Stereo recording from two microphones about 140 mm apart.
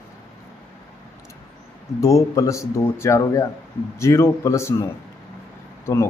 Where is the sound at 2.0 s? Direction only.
25° left (ahead or behind).